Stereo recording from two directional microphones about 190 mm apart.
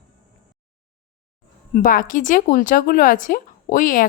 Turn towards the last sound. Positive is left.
turn(degrees=45)  # may be behind; listen again after turning